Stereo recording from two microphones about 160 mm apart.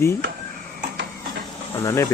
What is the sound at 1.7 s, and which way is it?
Speech, 15° left (ahead or behind).